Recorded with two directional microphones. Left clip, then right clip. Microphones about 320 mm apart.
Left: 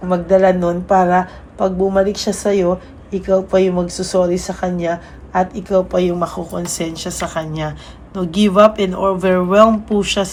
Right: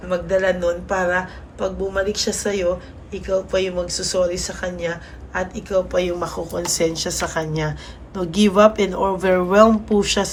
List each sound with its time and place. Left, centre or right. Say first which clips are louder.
0.1 s speech: left 6 dB; centre